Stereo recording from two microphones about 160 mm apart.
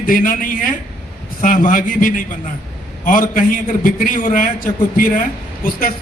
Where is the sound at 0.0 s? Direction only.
60° left (ahead or behind).